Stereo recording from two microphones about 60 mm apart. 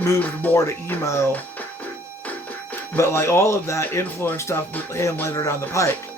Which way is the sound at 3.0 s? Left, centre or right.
Left.